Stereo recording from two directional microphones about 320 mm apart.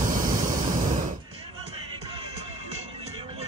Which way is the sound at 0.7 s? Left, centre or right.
Right.